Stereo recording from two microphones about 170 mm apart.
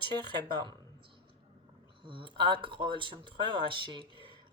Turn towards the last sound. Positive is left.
turn(degrees=-30)  # may be behind; listen again after turning